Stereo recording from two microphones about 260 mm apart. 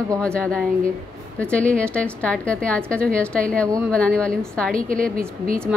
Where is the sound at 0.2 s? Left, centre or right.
Centre.